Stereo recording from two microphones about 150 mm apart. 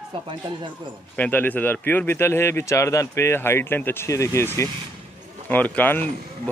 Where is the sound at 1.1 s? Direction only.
10° left (ahead or behind).